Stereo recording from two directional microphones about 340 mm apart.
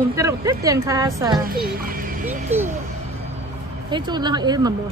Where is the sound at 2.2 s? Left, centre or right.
Centre.